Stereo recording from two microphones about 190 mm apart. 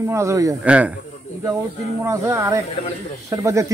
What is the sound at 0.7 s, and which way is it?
Speech, 5° right (ahead or behind).